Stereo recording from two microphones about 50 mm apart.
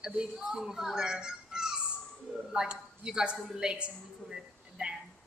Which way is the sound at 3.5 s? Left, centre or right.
Centre.